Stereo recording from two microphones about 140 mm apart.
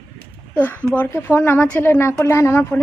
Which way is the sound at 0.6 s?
10° left (ahead or behind).